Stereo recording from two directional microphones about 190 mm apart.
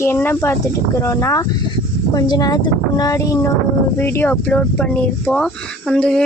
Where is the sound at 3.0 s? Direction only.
15° left (ahead or behind).